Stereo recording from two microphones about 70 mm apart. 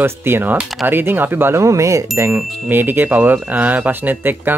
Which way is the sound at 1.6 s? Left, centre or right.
Right.